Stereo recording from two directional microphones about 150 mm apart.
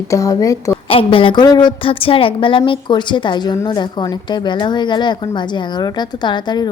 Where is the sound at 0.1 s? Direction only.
20° left (ahead or behind).